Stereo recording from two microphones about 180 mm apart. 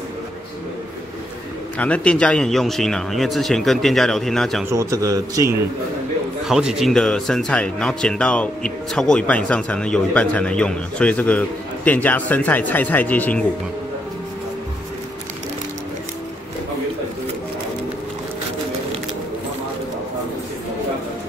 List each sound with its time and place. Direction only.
1.8 s speech: 5° left (ahead or behind)
4.6 s speech: 15° right (ahead or behind)
6.4 s speech: centre (ahead or behind)